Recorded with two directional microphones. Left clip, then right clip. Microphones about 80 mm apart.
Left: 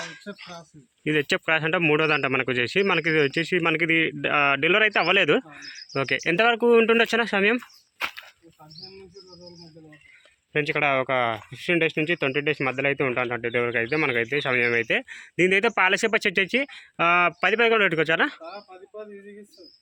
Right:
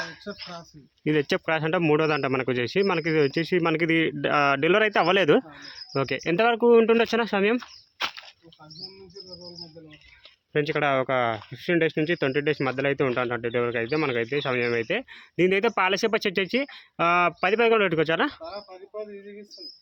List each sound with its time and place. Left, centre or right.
0.3 s speech: centre
1.0 s speech: right
3.8 s a man's voice: right
5.5 s speech: right
6.0 s speech: right
7.6 s a sound: centre
10.5 s speech: right
13.6 s speech: centre; by 18.4 s right
18.5 s speech: right